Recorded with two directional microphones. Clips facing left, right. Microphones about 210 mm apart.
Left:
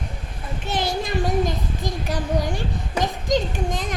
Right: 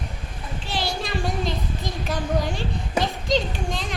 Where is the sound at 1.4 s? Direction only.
15° left (ahead or behind).